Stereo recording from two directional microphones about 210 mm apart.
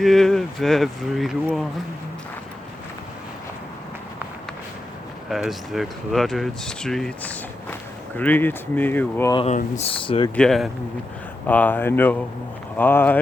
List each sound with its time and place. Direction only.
0.0 s speech: centre (ahead or behind)
5.3 s speech: centre (ahead or behind)
9.3 s speech: 25° left (ahead or behind)
10.3 s speech: centre (ahead or behind)